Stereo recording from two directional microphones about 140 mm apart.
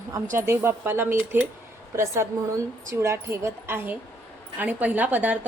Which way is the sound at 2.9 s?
20° right (ahead or behind).